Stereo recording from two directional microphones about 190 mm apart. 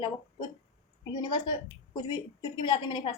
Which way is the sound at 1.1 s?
20° left (ahead or behind).